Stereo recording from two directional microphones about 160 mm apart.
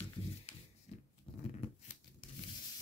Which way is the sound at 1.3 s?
35° left (ahead or behind).